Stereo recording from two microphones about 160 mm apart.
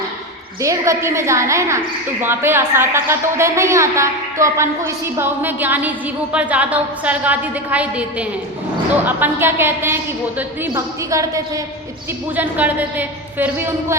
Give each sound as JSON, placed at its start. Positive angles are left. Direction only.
{"t": 0.6, "sound": "a woman's voice", "side_deg": -20}